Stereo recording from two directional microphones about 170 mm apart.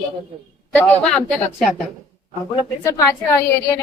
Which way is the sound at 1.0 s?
Centre (ahead or behind).